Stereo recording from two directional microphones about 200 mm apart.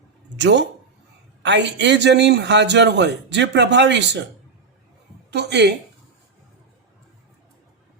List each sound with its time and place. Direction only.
0.3 s a man's voice: 60° right (ahead or behind)
5.3 s a man's voice: 55° right (ahead or behind)